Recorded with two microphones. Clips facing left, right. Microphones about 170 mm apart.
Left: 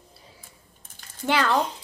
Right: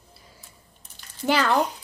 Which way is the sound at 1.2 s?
Centre (ahead or behind).